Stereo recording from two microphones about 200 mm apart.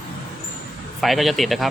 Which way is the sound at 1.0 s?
Centre (ahead or behind).